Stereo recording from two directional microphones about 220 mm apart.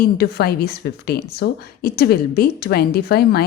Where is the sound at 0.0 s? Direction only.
45° left (ahead or behind).